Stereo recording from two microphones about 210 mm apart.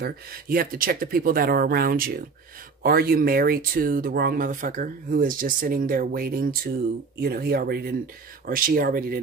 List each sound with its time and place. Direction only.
0.0 s speech: 45° right (ahead or behind)